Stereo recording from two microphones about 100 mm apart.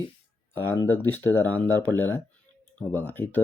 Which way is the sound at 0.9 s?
20° left (ahead or behind).